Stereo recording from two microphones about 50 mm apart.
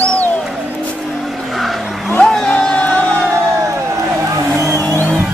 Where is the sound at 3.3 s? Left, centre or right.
Right.